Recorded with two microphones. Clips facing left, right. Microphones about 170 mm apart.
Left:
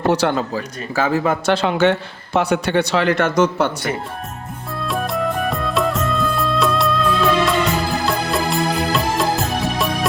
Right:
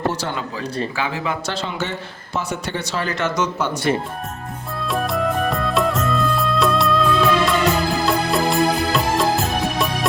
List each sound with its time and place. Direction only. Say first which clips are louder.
0.1 s speech: left 9 dB; 65° left (ahead or behind)
0.9 s a man's voice: left 6 dB; 45° left (ahead or behind)
4.8 s music: even; centre (ahead or behind)